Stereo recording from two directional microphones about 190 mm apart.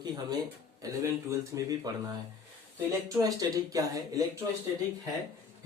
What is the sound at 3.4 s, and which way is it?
Speech, 20° right (ahead or behind).